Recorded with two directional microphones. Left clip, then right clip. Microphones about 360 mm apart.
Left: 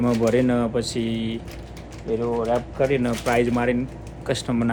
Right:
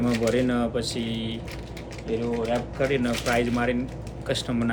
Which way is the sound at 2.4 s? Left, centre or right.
Centre.